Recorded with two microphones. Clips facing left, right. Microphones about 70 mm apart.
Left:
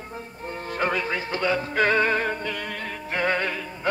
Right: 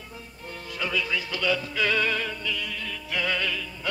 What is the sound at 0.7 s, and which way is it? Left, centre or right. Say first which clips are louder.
Music: left 3 dB; left.